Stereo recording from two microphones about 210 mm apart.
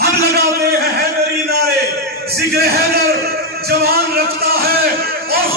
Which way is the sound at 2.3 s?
50° right (ahead or behind).